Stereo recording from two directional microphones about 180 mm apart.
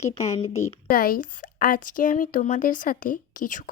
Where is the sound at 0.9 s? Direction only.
55° left (ahead or behind).